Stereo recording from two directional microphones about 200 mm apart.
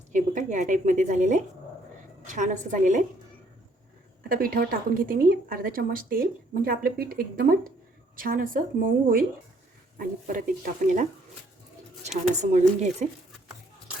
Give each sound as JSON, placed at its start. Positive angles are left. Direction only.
{"t": 0.1, "sound": "a woman's voice", "side_deg": -40}
{"t": 4.2, "sound": "a woman's voice", "side_deg": -45}
{"t": 10.0, "sound": "a woman's voice", "side_deg": -45}
{"t": 12.0, "sound": "a woman's voice", "side_deg": -35}